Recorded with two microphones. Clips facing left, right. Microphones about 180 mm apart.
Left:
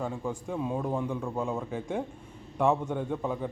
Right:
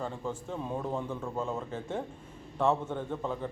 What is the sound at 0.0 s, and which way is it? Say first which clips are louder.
A man's voice: left 3 dB; 10° left (ahead or behind).